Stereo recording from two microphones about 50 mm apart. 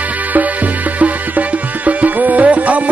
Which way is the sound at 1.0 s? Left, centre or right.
Right.